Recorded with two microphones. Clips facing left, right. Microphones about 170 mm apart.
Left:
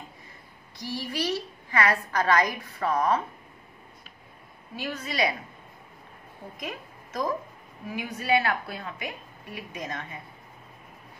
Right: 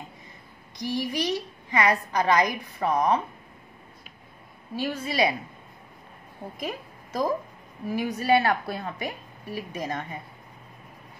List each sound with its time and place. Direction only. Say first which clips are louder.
0.7 s a woman's voice: right 4 dB; 15° right (ahead or behind)
4.7 s a woman's voice: right 4 dB; 30° right (ahead or behind)
6.6 s a woman's voice: right 4 dB; 30° right (ahead or behind)